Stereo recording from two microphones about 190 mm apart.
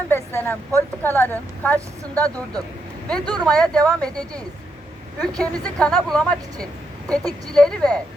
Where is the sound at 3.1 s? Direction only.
5° left (ahead or behind).